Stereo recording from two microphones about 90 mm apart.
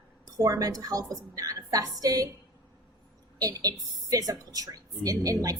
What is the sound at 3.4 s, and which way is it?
A woman's voice, 40° right (ahead or behind).